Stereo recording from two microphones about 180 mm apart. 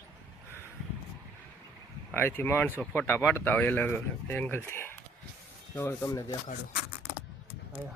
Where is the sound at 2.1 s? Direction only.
10° left (ahead or behind).